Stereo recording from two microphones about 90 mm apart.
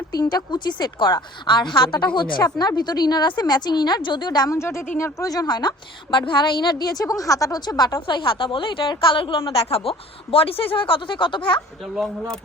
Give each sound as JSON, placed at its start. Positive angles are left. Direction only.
{"t": 0.1, "sound": "a woman's voice", "side_deg": 45}
{"t": 4.5, "sound": "speech", "side_deg": 30}
{"t": 5.3, "sound": "a woman's voice", "side_deg": 50}
{"t": 8.0, "sound": "a woman's voice", "side_deg": 65}
{"t": 9.6, "sound": "a woman's voice", "side_deg": 90}